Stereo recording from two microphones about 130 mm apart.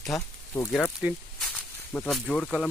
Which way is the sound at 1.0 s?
10° right (ahead or behind).